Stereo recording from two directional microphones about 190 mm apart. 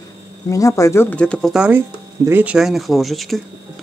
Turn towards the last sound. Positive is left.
turn(degrees=0)  # may be behind; listen again after turning